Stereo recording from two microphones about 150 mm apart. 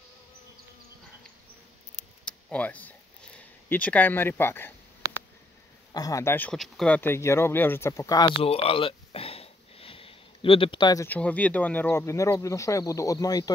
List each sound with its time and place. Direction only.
2.2 s a sound: 10° left (ahead or behind)
3.6 s speech: 10° left (ahead or behind)
5.9 s speech: 20° left (ahead or behind); by 7.0 s 5° left (ahead or behind)
7.0 s speech: 15° left (ahead or behind)
8.3 s a sound: 40° left (ahead or behind)
11.1 s speech: 10° left (ahead or behind)